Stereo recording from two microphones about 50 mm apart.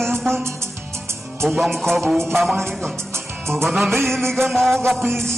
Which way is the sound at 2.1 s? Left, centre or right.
Centre.